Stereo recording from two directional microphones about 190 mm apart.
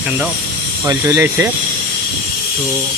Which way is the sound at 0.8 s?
15° right (ahead or behind).